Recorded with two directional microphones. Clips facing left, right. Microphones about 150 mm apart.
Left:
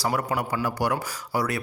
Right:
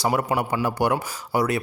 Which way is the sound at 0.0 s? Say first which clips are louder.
Right 3 dB; 20° right (ahead or behind).